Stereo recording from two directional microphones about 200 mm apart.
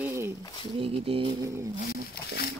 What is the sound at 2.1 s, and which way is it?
Speech, 50° left (ahead or behind).